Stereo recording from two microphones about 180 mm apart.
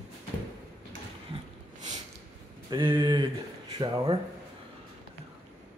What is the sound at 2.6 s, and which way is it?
Speech, 25° right (ahead or behind).